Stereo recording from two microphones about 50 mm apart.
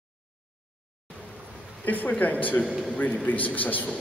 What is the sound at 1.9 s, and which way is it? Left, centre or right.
Speech, left.